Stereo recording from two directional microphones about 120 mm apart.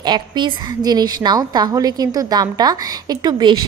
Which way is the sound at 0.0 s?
40° right (ahead or behind).